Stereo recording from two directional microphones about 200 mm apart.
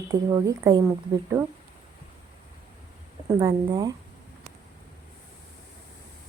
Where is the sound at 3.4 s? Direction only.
20° right (ahead or behind).